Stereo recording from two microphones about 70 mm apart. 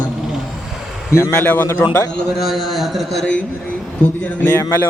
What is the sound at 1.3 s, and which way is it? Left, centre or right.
Speech, left.